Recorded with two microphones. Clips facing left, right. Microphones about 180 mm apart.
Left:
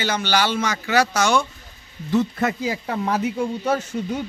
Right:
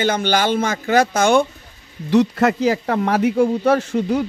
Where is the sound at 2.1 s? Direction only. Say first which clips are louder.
Right 5 dB; 85° right.